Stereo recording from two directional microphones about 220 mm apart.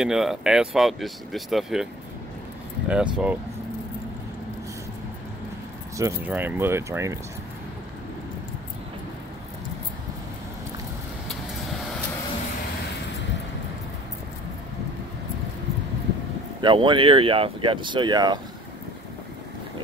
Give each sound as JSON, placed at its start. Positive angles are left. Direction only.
{"t": 0.0, "sound": "speech", "side_deg": 0}
{"t": 2.9, "sound": "speech", "side_deg": -5}
{"t": 5.9, "sound": "speech", "side_deg": -10}
{"t": 16.6, "sound": "speech", "side_deg": -20}